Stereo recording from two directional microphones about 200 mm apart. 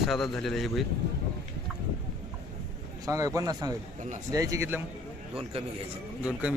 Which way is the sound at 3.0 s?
15° right (ahead or behind).